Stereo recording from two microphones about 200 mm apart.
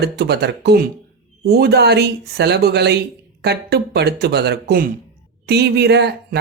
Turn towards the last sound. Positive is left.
turn(degrees=-55)  # may be behind; listen again after turning